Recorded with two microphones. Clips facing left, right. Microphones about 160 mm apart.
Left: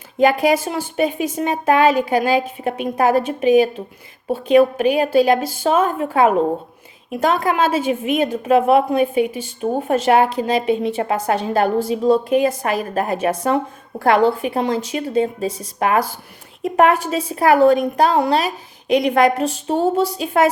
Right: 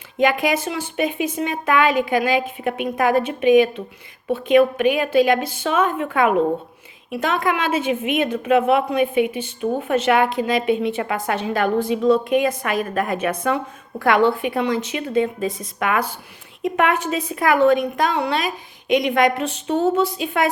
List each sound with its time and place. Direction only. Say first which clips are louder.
0.2 s a woman's voice: left 4 dB; 40° left (ahead or behind)